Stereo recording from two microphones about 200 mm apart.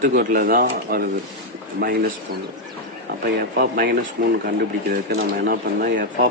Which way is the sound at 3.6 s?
50° right (ahead or behind).